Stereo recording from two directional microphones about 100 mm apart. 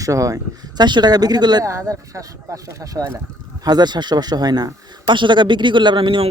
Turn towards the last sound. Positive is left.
turn(degrees=-60)  # may be behind; listen again after turning